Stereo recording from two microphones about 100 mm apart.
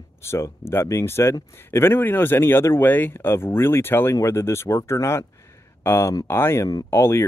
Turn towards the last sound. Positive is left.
turn(degrees=25)  # may be behind; listen again after turning